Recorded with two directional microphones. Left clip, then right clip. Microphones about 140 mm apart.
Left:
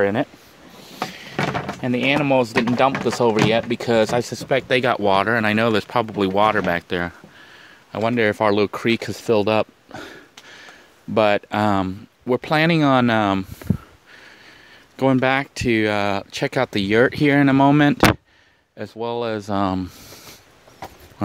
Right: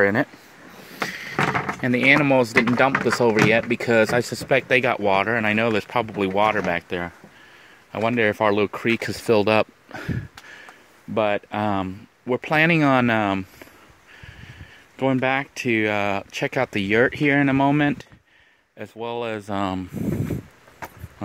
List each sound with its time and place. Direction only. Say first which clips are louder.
0.0 s speech: even; centre (ahead or behind)
1.0 s a sound: right 2 dB; centre (ahead or behind)
3.0 s speech: even; centre (ahead or behind)
4.6 s speech: left 1 dB; 20° left (ahead or behind)
6.9 s speech: left 4 dB; 50° left (ahead or behind)
7.9 s speech: left 1 dB; 15° left (ahead or behind)
9.0 s speech: right 2 dB; centre (ahead or behind)
11.1 s speech: left 5 dB; 35° left (ahead or behind)
15.0 s speech: left 3 dB; 30° left (ahead or behind)